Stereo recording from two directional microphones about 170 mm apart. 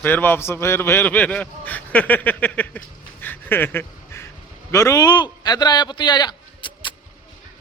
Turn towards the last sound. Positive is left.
turn(degrees=30)  # may be behind; listen again after turning